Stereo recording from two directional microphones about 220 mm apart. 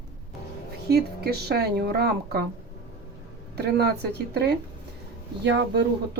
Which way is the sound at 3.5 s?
50° right (ahead or behind).